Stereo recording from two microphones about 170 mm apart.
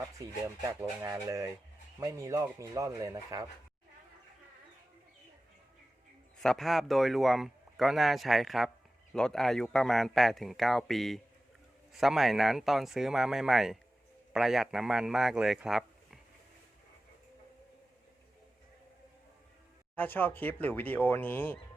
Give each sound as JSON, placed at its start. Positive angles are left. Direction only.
{"t": 0.2, "sound": "speech", "side_deg": -20}
{"t": 6.4, "sound": "a man's voice", "side_deg": 0}
{"t": 20.0, "sound": "speech", "side_deg": 10}